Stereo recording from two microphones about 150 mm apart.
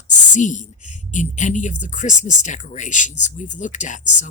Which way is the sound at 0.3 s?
55° left (ahead or behind).